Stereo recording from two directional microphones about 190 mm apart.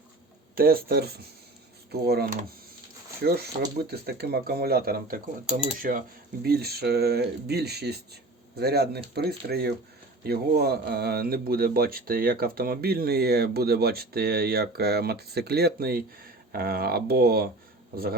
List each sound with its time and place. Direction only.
0.5 s speech: 50° right (ahead or behind)